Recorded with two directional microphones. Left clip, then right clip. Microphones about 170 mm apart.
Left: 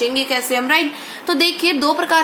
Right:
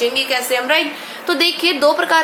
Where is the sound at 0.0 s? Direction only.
20° left (ahead or behind).